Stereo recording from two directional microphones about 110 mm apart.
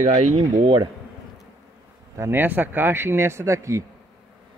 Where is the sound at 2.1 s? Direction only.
20° right (ahead or behind).